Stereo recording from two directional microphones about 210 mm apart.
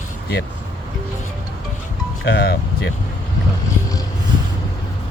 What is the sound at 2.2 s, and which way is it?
Speech, 50° left (ahead or behind).